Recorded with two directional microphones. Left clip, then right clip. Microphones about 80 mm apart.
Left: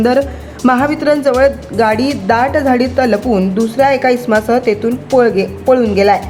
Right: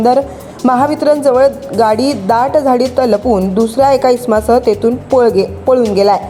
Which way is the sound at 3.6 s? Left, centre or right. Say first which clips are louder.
Right 1 dB; right.